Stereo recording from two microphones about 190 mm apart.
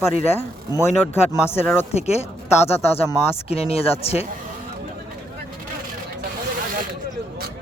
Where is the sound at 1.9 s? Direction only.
35° left (ahead or behind).